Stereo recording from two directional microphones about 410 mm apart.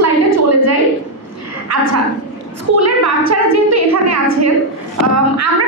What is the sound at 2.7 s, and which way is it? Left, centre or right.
A woman's voice, right.